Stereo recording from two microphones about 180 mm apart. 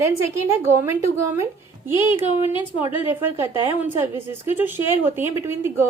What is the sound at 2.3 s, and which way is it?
Speech, 30° left (ahead or behind).